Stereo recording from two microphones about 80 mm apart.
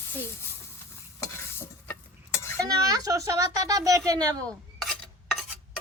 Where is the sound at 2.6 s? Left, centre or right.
Right.